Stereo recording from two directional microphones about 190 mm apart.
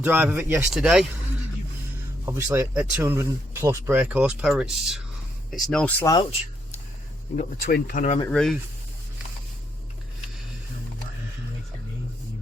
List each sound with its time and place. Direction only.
0.0 s speech: 10° right (ahead or behind)
2.2 s speech: 15° right (ahead or behind); by 6.1 s 5° left (ahead or behind)
7.3 s speech: 50° left (ahead or behind)
8.3 s speech: 5° left (ahead or behind)